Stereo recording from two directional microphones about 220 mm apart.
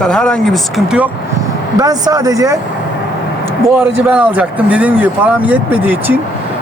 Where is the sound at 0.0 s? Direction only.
5° left (ahead or behind).